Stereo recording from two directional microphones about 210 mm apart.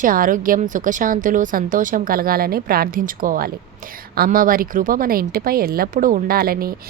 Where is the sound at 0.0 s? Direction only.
40° right (ahead or behind).